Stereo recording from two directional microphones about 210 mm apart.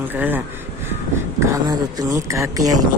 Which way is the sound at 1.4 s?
15° right (ahead or behind).